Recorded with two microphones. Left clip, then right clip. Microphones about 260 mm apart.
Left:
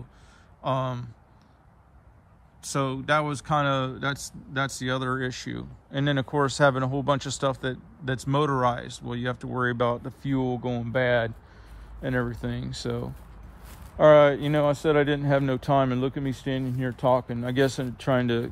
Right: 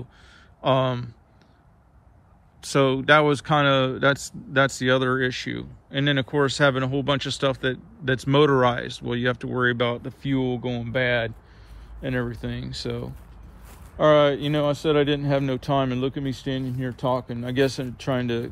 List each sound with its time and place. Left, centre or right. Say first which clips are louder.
0.6 s speech: right 6 dB; centre
2.6 s speech: right 8 dB; centre